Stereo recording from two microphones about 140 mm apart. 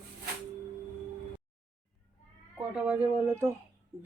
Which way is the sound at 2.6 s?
10° right (ahead or behind).